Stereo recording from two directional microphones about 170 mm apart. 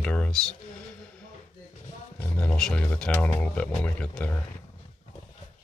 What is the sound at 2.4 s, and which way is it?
Speech, 5° left (ahead or behind).